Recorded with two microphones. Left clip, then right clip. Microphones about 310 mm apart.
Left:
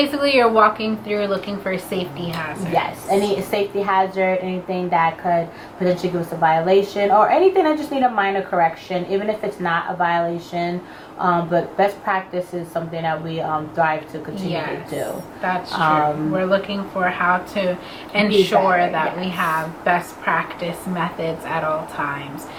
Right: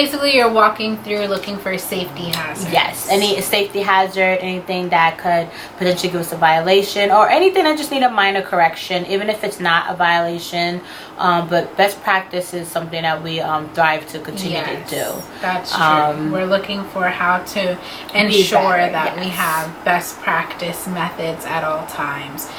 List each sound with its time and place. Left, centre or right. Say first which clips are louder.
0.0 s a woman's voice: right 2 dB; centre
14.4 s a woman's voice: right 3 dB; centre